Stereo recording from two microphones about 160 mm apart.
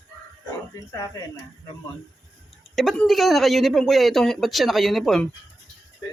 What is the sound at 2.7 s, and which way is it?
Speech, centre (ahead or behind).